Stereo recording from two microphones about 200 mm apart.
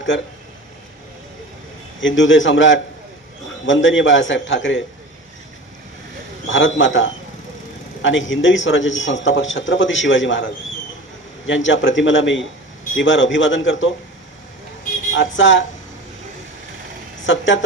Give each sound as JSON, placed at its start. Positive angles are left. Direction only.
{"t": 2.0, "sound": "a man's voice", "side_deg": 70}
{"t": 6.5, "sound": "a man's voice", "side_deg": 70}
{"t": 15.1, "sound": "a man's voice", "side_deg": 70}
{"t": 17.2, "sound": "a man's voice", "side_deg": 70}